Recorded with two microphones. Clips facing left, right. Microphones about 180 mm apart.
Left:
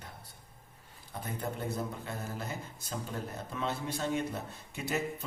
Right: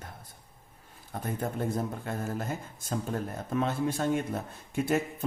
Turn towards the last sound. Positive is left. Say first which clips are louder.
# right 6 dB
turn(degrees=-50)  # may be behind; listen again after turning